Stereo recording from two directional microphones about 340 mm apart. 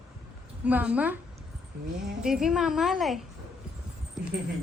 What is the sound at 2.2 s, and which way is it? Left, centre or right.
A woman's voice, centre.